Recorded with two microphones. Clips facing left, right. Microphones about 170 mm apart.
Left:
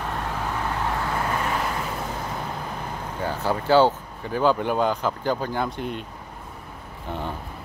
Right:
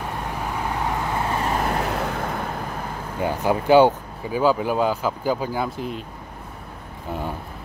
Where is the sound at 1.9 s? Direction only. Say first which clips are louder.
Right 5 dB; 75° right (ahead or behind).